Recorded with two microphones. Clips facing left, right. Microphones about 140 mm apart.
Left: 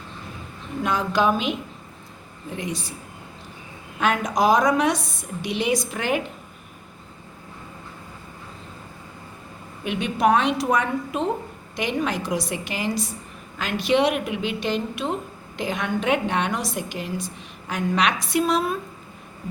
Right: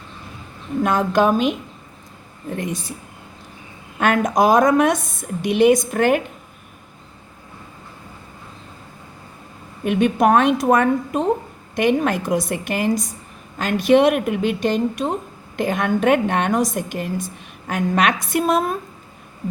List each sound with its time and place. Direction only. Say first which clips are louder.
0.8 s a woman's voice: right 5 dB; 50° right (ahead or behind)
4.0 s a woman's voice: right 4 dB; 50° right (ahead or behind)
9.8 s a woman's voice: right 5 dB; 50° right (ahead or behind)